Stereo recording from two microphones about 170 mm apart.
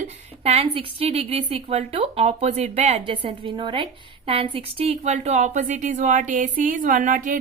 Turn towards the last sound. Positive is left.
turn(degrees=-50)  # may be behind; listen again after turning